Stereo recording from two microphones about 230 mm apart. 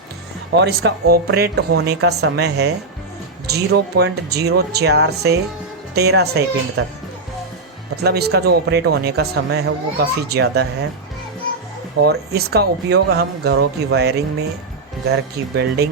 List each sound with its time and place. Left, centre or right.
0.6 s speech: right
8.0 s speech: right
11.9 s speech: right